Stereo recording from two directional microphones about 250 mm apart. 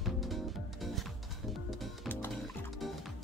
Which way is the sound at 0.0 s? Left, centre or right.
Centre.